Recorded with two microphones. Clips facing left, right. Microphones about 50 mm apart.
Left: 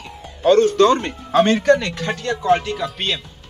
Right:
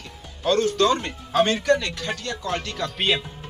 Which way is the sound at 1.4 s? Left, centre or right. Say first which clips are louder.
Left 5 dB; left.